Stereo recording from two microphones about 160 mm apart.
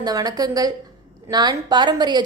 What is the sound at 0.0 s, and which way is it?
A woman's voice, 25° right (ahead or behind).